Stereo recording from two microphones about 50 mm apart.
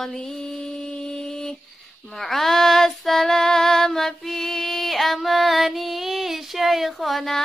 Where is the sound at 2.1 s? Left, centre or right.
Centre.